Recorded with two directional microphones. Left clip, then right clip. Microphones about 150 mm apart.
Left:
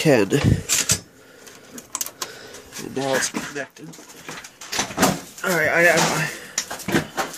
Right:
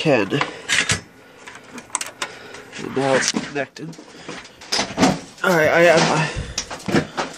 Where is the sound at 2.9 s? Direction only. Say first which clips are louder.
Right 4 dB; 10° right (ahead or behind).